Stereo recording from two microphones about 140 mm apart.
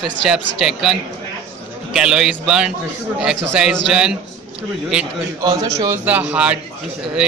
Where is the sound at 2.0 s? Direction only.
5° right (ahead or behind).